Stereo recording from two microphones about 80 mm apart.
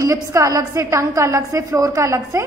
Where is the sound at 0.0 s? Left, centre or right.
Right.